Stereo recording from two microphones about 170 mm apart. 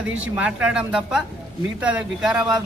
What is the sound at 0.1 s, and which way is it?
A woman's voice, 10° right (ahead or behind).